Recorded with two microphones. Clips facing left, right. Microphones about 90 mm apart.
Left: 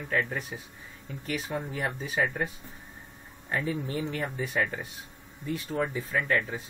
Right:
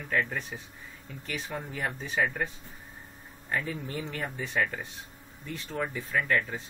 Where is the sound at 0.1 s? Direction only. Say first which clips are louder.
Even; 10° left (ahead or behind).